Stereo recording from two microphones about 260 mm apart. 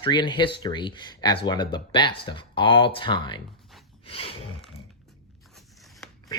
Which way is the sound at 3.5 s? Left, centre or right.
Centre.